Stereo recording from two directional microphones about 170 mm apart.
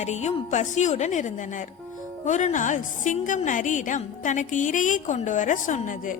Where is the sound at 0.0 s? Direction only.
40° left (ahead or behind).